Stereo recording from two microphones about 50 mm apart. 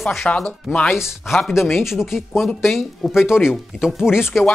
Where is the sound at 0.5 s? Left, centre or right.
Left.